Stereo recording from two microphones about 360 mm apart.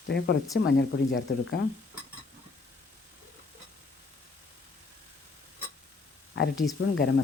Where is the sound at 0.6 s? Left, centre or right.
Left.